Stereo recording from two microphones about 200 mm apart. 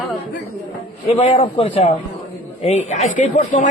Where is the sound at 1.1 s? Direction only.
30° left (ahead or behind).